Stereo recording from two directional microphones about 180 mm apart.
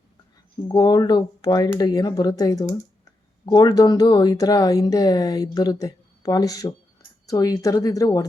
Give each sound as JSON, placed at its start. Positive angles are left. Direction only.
{"t": 0.7, "sound": "speech", "side_deg": 25}